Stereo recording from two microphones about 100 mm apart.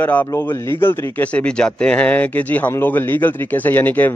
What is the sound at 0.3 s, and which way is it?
Speech, 25° left (ahead or behind).